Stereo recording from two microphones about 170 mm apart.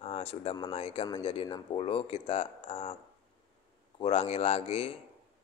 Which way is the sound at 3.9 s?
35° left (ahead or behind).